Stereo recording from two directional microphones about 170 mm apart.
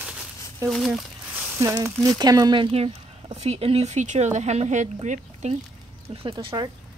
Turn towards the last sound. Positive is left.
turn(degrees=-25)  # may be behind; listen again after turning